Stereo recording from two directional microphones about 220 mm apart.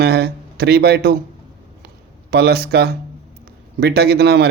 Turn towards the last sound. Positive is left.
turn(degrees=-45)  # may be behind; listen again after turning